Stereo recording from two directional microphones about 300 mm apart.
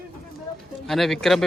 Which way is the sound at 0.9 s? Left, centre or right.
Centre.